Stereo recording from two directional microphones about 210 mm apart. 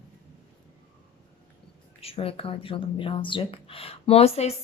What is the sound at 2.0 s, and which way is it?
A woman's voice, 25° left (ahead or behind).